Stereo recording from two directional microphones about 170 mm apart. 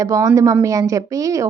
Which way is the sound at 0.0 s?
20° right (ahead or behind).